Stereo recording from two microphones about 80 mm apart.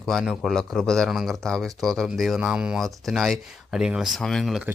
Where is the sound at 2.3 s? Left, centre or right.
Centre.